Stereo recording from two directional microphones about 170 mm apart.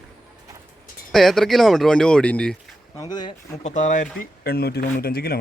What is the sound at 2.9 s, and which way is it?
Speech, 25° left (ahead or behind).